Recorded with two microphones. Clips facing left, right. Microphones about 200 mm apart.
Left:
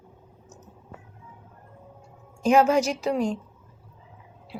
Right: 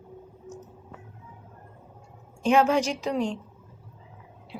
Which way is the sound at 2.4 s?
5° left (ahead or behind).